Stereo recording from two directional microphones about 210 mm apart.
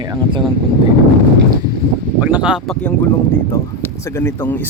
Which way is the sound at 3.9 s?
10° left (ahead or behind).